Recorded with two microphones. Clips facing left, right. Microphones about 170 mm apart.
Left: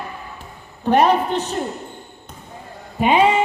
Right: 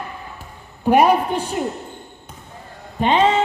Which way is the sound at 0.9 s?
10° right (ahead or behind).